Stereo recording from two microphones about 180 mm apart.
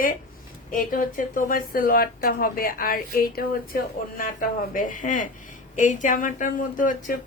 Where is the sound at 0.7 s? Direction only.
50° left (ahead or behind).